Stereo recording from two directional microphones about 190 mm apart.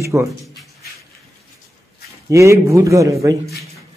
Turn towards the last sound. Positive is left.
turn(degrees=-20)  # may be behind; listen again after turning